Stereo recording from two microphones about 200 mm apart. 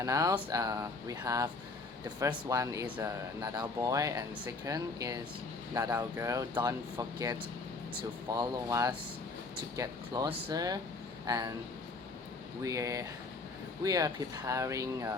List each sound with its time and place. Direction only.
0.0 s speech: 15° right (ahead or behind)
12.6 s speech: 15° right (ahead or behind)